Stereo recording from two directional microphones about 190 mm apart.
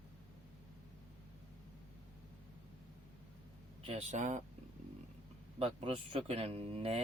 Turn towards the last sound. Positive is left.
turn(degrees=-30)  # may be behind; listen again after turning